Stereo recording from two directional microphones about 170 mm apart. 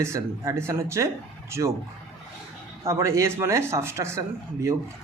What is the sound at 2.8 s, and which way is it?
Speech, 15° right (ahead or behind).